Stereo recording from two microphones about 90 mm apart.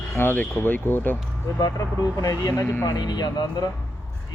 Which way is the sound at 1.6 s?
45° left (ahead or behind).